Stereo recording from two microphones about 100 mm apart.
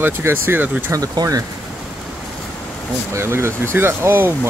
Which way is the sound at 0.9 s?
35° right (ahead or behind).